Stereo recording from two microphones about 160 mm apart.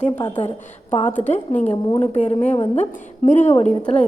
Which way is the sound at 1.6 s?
40° left (ahead or behind).